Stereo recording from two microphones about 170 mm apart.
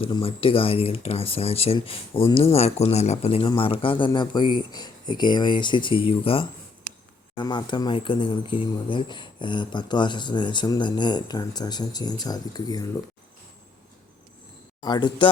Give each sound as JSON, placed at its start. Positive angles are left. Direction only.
{"t": 0.0, "sound": "a man's voice", "side_deg": 35}
{"t": 14.8, "sound": "speech", "side_deg": 25}